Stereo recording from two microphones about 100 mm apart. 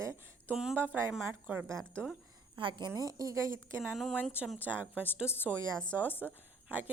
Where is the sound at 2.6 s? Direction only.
55° right (ahead or behind).